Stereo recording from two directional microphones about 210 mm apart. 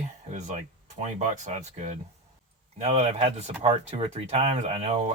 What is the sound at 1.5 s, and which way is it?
Speech, 35° right (ahead or behind).